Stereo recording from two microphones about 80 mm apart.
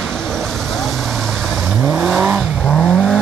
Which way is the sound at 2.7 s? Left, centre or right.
Centre.